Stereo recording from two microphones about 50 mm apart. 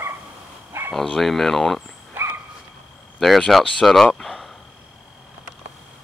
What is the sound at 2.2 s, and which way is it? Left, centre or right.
Dog, right.